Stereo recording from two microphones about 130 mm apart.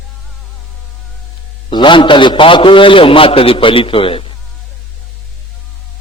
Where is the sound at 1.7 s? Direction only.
35° left (ahead or behind).